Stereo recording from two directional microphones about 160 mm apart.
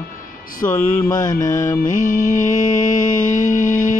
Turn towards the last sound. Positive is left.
turn(degrees=55)  # may be behind; listen again after turning